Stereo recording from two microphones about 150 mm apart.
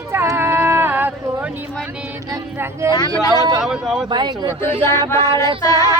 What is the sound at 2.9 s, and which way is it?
Speech, 25° left (ahead or behind).